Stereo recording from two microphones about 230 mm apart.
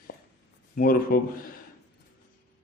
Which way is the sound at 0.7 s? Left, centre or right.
Left.